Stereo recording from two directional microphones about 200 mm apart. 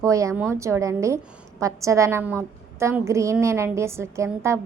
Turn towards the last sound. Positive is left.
turn(degrees=-15)  # may be behind; listen again after turning